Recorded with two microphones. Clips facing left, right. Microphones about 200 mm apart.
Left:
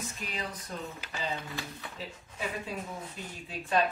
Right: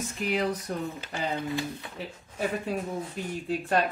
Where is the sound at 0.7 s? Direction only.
60° right (ahead or behind).